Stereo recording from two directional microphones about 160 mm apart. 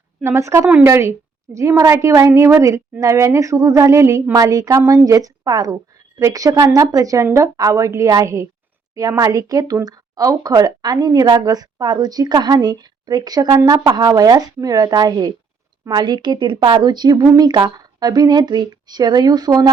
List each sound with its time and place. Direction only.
0.2 s a woman's voice: 15° right (ahead or behind)